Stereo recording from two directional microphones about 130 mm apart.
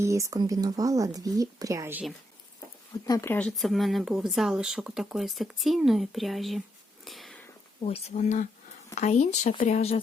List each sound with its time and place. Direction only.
0.0 s speech: 25° right (ahead or behind)
3.1 s speech: 25° left (ahead or behind)
3.3 s speech: 5° left (ahead or behind)
7.0 s a sound: centre (ahead or behind)
7.9 s speech: 50° left (ahead or behind)